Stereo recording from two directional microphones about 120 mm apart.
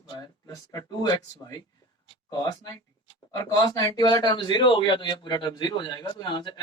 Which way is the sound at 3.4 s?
30° left (ahead or behind).